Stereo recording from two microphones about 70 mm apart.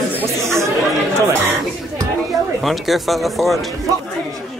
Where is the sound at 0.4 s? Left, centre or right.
Right.